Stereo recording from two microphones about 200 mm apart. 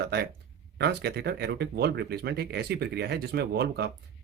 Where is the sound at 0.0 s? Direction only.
55° right (ahead or behind).